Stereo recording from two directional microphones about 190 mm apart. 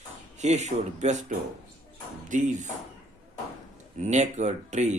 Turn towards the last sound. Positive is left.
turn(degrees=-35)  # may be behind; listen again after turning